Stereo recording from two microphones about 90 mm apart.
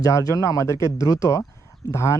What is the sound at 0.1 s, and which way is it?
Speech, 40° left (ahead or behind).